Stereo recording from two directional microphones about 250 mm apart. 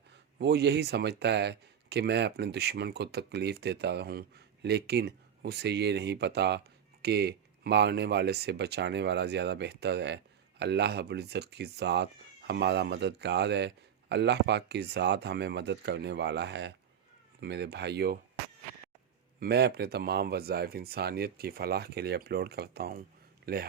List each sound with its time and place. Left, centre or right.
0.3 s speech: right
19.4 s speech: right